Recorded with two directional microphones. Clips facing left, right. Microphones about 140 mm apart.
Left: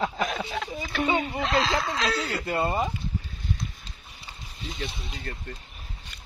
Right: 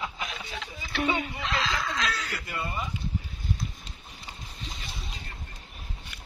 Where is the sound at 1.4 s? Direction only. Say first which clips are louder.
Left 5 dB; 35° left (ahead or behind).